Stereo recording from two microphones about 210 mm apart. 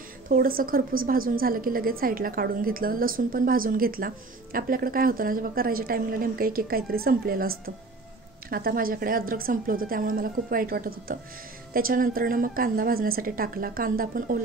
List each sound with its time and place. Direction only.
0.3 s a woman's voice: 45° right (ahead or behind)